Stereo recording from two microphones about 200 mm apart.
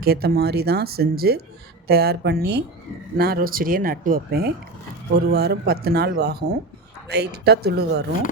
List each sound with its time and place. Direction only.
0.0 s speech: 50° right (ahead or behind)